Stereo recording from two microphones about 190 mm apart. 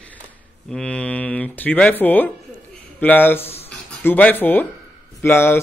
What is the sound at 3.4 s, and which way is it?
Speech, 30° left (ahead or behind).